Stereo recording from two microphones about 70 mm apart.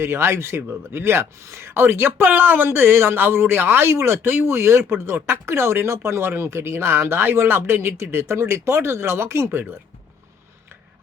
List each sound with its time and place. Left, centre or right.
0.0 s speech: right